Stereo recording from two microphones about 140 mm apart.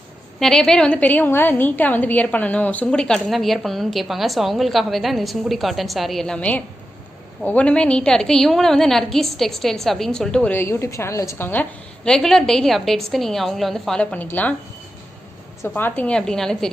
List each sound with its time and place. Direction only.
0.3 s a woman's voice: 5° left (ahead or behind)
12.0 s a woman's voice: 5° left (ahead or behind)
15.6 s a woman's voice: 15° left (ahead or behind)